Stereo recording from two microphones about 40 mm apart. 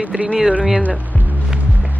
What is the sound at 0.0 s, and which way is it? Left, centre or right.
Speech, right.